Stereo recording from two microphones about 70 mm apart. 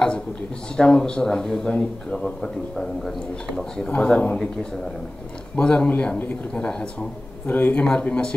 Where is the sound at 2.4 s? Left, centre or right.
Centre.